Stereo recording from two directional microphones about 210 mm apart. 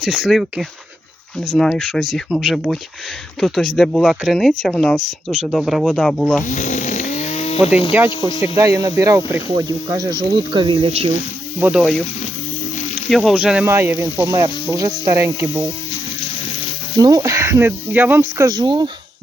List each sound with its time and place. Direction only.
0.0 s speech: centre (ahead or behind)
6.4 s snoring: 35° left (ahead or behind)
7.9 s speech: 10° right (ahead or behind); by 11.1 s 30° right (ahead or behind)
11.6 s speech: 5° right (ahead or behind)
13.1 s speech: centre (ahead or behind)
17.0 s speech: 15° right (ahead or behind)